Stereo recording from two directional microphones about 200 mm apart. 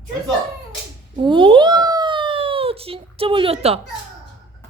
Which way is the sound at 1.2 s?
25° right (ahead or behind).